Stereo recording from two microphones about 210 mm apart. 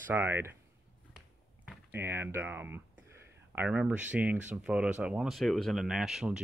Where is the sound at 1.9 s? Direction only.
10° right (ahead or behind).